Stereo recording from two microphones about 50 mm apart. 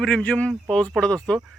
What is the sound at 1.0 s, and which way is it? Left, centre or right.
Speech, centre.